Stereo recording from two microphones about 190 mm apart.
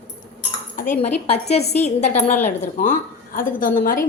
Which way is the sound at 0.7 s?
40° left (ahead or behind).